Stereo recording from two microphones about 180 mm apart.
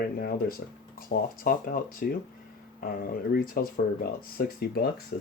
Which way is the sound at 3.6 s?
50° left (ahead or behind).